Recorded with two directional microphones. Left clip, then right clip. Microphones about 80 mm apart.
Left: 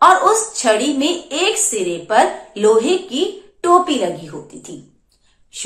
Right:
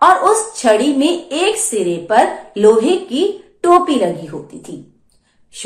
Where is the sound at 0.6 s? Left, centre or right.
Right.